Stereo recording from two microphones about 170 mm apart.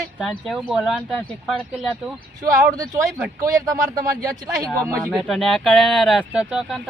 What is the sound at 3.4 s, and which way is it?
Speech, 20° right (ahead or behind).